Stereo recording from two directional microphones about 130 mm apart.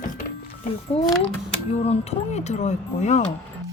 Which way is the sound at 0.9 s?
50° left (ahead or behind).